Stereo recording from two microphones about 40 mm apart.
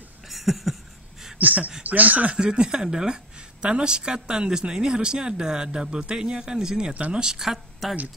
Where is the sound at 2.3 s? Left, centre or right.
Right.